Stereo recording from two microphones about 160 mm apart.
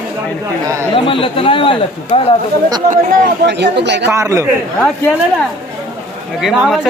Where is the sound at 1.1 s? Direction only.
35° left (ahead or behind).